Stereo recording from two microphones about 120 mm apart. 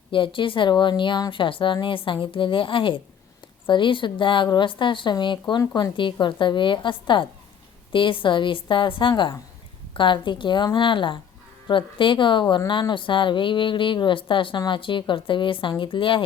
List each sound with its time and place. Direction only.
0.1 s a woman's voice: 45° left (ahead or behind)